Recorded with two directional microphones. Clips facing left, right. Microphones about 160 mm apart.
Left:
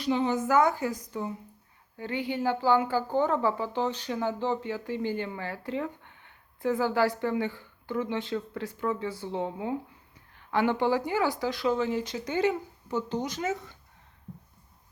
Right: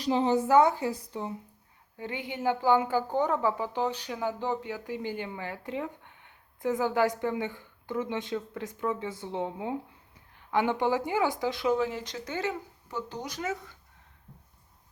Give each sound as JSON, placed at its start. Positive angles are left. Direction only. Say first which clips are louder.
{"t": 0.0, "sound": "a woman's voice", "louder": "right 1 dB", "side_deg": -35}
{"t": 2.0, "sound": "a woman's voice", "louder": "left 4 dB", "side_deg": -20}
{"t": 11.8, "sound": "speech", "louder": "left 2 dB", "side_deg": 0}
{"t": 12.1, "sound": "speech", "louder": "left 6 dB", "side_deg": 15}